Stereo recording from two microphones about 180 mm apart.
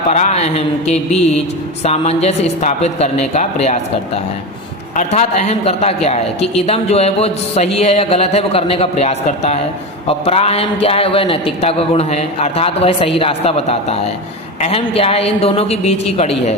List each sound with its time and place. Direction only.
0.1 s a man's voice: 40° left (ahead or behind)